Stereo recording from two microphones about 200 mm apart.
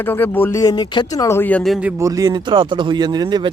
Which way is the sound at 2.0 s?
15° right (ahead or behind).